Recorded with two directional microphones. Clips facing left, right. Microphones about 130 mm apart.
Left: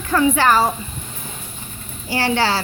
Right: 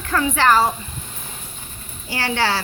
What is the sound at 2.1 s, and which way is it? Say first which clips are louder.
Speech: left 3 dB; 35° left (ahead or behind).